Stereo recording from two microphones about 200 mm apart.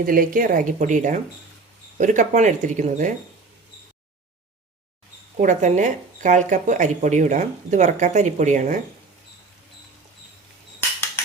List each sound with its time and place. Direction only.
0.0 s speech: 45° right (ahead or behind)
5.4 s speech: 40° right (ahead or behind)